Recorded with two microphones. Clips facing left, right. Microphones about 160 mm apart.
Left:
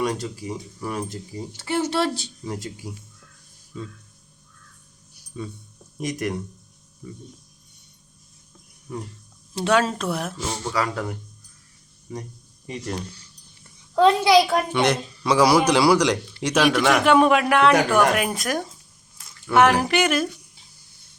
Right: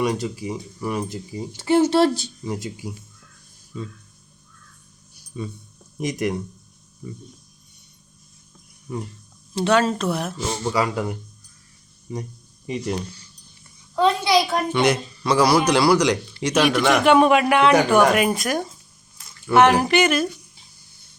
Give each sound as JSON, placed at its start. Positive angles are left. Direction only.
{"t": 0.0, "sound": "speech", "side_deg": -10}
{"t": 1.9, "sound": "speech", "side_deg": -40}
{"t": 5.3, "sound": "speech", "side_deg": -10}
{"t": 9.6, "sound": "speech", "side_deg": 5}
{"t": 10.6, "sound": "speech", "side_deg": -10}
{"t": 12.6, "sound": "a woman's voice", "side_deg": -10}